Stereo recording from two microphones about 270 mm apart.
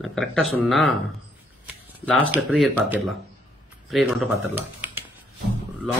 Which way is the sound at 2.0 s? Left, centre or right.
Centre.